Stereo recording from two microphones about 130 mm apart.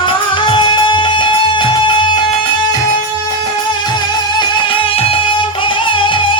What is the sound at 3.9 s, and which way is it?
Music, 35° left (ahead or behind).